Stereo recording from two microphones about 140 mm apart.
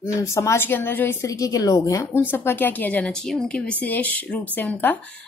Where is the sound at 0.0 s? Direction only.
20° left (ahead or behind).